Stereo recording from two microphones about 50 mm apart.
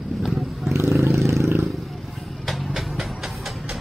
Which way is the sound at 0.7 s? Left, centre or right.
Right.